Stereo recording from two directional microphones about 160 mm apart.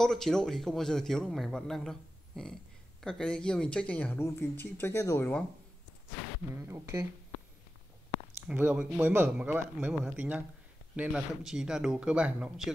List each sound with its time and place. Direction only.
0.0 s speech: 5° left (ahead or behind)
6.5 s speech: 15° right (ahead or behind)
8.5 s speech: 10° right (ahead or behind)